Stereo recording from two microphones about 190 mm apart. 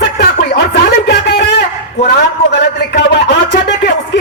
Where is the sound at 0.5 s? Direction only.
60° left (ahead or behind).